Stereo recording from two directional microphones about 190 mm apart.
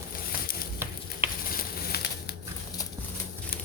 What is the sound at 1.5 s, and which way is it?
Bird, 55° left (ahead or behind).